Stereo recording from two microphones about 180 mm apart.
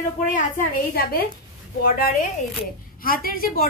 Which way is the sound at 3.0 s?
55° left (ahead or behind).